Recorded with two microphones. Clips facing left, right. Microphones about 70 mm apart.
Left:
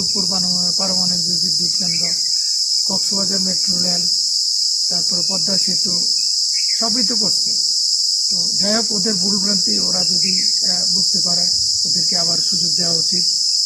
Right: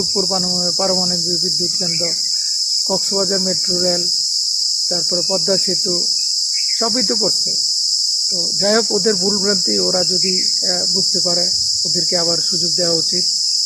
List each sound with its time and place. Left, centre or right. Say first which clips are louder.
8.6 s cricket: right 6 dB; right